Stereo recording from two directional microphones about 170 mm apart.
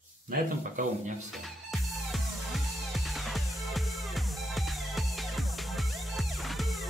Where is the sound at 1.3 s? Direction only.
Centre (ahead or behind).